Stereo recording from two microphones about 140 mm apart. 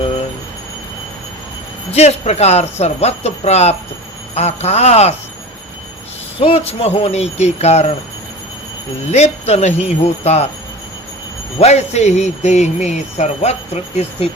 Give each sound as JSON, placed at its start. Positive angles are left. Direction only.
{"t": 1.9, "sound": "speech", "side_deg": 50}
{"t": 6.4, "sound": "speech", "side_deg": 45}
{"t": 9.1, "sound": "speech", "side_deg": 50}
{"t": 11.6, "sound": "speech", "side_deg": 50}